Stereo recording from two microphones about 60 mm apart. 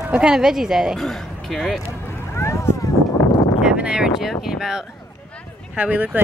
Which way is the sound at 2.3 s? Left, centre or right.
Left.